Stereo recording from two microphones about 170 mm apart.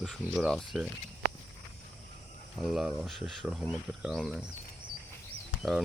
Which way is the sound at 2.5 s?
Centre (ahead or behind).